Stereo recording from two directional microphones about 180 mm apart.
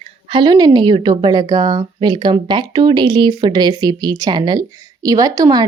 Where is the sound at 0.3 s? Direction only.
25° right (ahead or behind).